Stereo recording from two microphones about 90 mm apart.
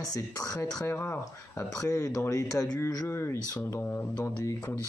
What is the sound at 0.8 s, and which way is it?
Speech, 25° left (ahead or behind).